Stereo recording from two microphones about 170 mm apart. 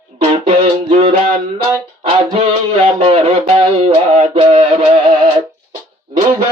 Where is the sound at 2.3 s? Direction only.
30° right (ahead or behind).